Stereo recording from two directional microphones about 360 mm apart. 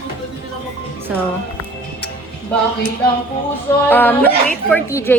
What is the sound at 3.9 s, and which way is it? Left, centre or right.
A woman's voice, centre.